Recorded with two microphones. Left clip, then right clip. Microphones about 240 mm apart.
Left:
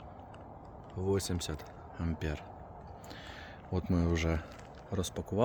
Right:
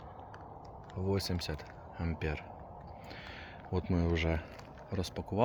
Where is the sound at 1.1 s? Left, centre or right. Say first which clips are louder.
Left 2 dB; centre.